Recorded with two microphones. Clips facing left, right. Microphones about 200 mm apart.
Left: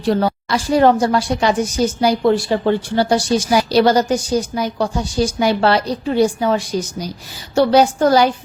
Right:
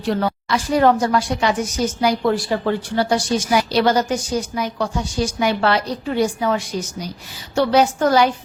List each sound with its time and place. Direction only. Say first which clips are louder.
0.1 s a woman's voice: left 3 dB; 35° left (ahead or behind)